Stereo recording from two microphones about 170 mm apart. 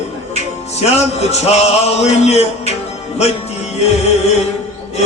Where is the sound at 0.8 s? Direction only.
40° left (ahead or behind).